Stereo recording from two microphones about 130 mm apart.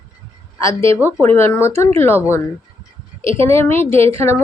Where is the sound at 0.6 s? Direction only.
20° left (ahead or behind).